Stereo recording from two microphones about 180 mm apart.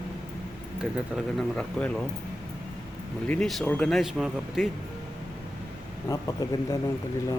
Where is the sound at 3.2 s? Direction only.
5° left (ahead or behind).